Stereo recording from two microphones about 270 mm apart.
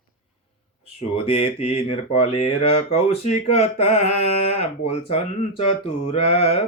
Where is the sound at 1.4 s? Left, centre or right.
Left.